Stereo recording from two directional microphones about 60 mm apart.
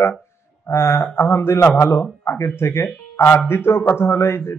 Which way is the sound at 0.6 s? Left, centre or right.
Left.